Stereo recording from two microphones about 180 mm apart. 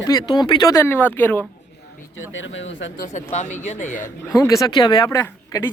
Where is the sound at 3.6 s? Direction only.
45° left (ahead or behind).